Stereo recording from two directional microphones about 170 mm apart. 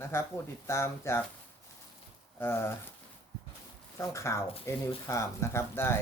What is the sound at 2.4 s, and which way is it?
Speech, 15° left (ahead or behind).